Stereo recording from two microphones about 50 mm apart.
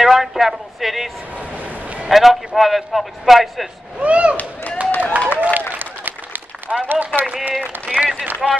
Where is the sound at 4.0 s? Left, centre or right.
Right.